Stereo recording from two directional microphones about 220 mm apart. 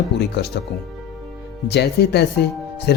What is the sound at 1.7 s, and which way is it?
Speech, 50° left (ahead or behind).